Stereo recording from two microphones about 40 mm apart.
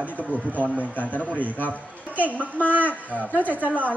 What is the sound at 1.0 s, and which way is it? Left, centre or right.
Speech, left.